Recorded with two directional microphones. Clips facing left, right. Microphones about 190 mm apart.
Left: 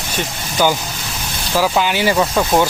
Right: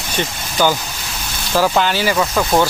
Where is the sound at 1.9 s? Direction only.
20° left (ahead or behind).